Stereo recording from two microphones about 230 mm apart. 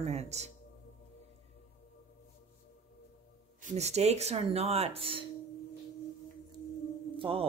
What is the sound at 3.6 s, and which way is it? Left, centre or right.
Speech, right.